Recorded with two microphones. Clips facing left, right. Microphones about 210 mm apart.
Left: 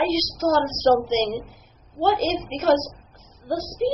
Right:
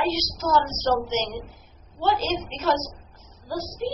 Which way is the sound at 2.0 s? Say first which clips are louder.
Left 3 dB; 50° left (ahead or behind).